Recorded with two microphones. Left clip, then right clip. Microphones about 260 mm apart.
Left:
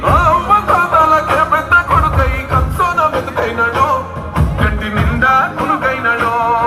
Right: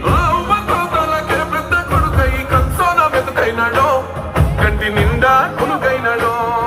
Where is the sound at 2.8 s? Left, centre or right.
Centre.